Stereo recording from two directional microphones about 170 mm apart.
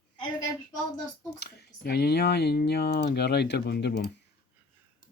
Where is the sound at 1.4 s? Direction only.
70° left (ahead or behind).